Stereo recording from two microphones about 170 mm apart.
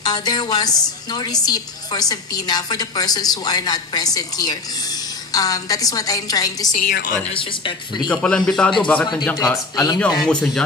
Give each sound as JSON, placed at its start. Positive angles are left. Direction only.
{"t": 0.0, "sound": "a woman's voice", "side_deg": 25}
{"t": 6.9, "sound": "speech", "side_deg": 55}
{"t": 7.2, "sound": "a woman's voice", "side_deg": 30}
{"t": 8.1, "sound": "a man's voice", "side_deg": 5}
{"t": 9.3, "sound": "a man's voice", "side_deg": 15}